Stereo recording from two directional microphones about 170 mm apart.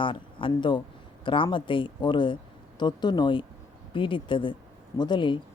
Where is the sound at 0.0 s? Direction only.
30° left (ahead or behind).